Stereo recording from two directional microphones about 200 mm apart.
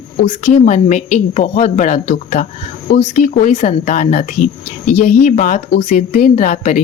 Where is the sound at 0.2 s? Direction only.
35° left (ahead or behind).